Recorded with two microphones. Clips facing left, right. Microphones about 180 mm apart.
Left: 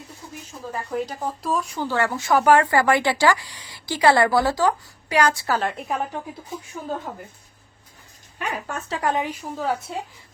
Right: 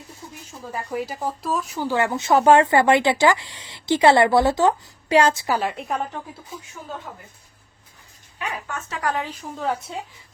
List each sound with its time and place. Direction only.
0.7 s speech: 10° right (ahead or behind)
5.7 s a woman's voice: centre (ahead or behind)
8.4 s speech: 40° left (ahead or behind)
9.0 s a woman's voice: 20° left (ahead or behind)
9.9 s a woman's voice: 5° left (ahead or behind)